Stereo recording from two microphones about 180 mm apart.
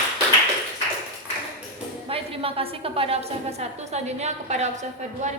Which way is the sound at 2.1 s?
30° right (ahead or behind).